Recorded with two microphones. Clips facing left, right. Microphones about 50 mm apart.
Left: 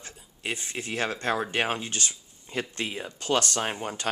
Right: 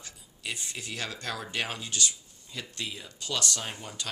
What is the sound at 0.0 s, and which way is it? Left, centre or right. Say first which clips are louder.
Speech: left 4 dB; left.